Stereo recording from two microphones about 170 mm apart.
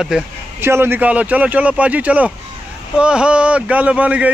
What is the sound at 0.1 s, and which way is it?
Speech, 5° right (ahead or behind).